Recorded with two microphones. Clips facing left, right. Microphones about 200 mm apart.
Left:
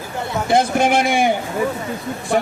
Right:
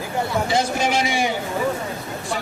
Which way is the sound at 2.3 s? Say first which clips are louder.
Left 11 dB; 55° left (ahead or behind).